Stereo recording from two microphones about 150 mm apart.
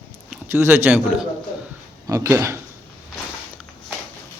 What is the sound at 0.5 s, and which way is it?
Speech, 15° right (ahead or behind).